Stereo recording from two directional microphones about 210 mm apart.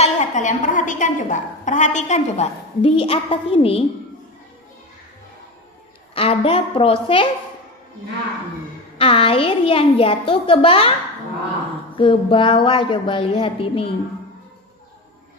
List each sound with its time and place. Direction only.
0.0 s a woman's voice: 35° left (ahead or behind)
6.1 s a child's voice: 25° left (ahead or behind)
9.0 s a child's voice: 25° left (ahead or behind)
11.9 s a child's voice: 25° left (ahead or behind)